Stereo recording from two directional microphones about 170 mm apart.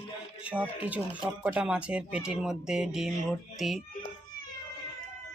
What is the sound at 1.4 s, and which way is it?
Speech, 5° right (ahead or behind).